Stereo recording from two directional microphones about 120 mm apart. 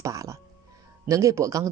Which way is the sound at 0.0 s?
30° right (ahead or behind).